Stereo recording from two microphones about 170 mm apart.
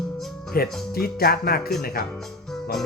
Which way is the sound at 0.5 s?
60° left (ahead or behind).